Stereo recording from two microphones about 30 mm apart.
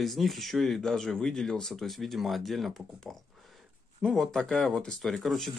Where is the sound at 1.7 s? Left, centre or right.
Centre.